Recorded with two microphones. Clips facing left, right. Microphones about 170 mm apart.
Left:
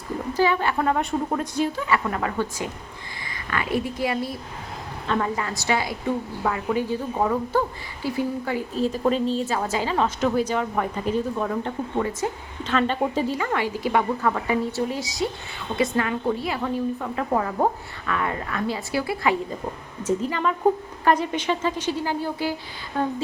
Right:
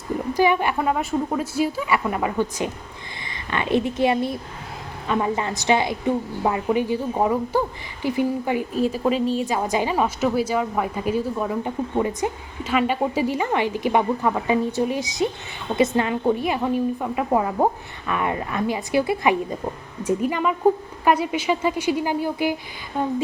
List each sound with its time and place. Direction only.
0.3 s a woman's voice: 15° right (ahead or behind)